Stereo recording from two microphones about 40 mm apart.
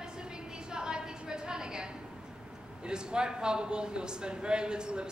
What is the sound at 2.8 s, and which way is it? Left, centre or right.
A woman's voice, right.